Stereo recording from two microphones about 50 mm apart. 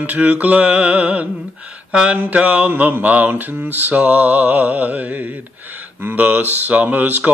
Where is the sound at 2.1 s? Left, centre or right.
Right.